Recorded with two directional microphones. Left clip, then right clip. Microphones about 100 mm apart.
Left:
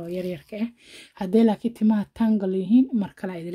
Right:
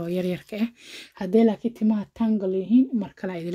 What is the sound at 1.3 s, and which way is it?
Speech, 20° left (ahead or behind).